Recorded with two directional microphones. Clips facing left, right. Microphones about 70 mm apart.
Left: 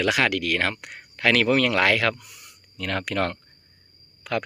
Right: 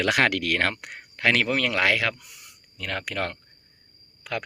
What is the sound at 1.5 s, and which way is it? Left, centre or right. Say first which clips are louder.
Speech: left 3 dB; centre.